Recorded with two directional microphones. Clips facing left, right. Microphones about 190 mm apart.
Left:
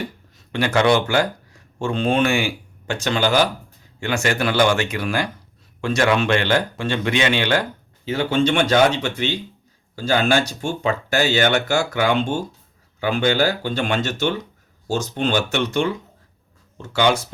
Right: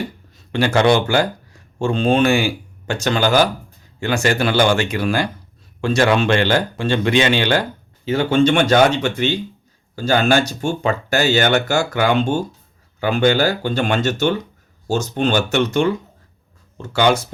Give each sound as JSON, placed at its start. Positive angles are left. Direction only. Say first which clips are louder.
{"t": 0.5, "sound": "a man's voice", "louder": "right 2 dB", "side_deg": -30}
{"t": 8.0, "sound": "speech", "louder": "right 4 dB", "side_deg": -50}
{"t": 16.9, "sound": "speech", "louder": "right 2 dB", "side_deg": -45}